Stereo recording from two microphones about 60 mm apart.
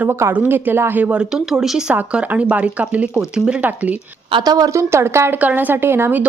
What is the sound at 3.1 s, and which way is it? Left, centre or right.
Speech, centre.